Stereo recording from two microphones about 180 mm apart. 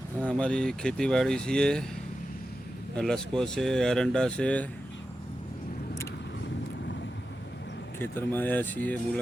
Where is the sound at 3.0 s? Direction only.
5° left (ahead or behind).